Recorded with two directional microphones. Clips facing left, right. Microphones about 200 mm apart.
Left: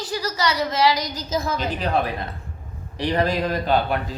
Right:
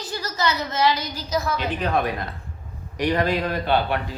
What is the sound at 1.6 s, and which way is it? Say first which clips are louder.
A man's voice: even; 35° left (ahead or behind).